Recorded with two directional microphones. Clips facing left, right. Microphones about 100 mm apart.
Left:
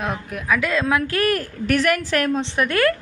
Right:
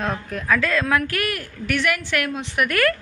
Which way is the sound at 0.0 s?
10° left (ahead or behind).